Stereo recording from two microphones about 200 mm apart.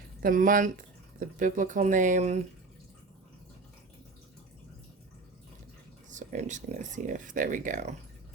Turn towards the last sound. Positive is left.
turn(degrees=-40)  # may be behind; listen again after turning